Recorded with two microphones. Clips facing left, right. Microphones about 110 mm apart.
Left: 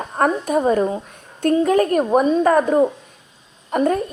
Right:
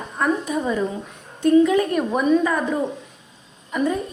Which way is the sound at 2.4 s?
45° left (ahead or behind).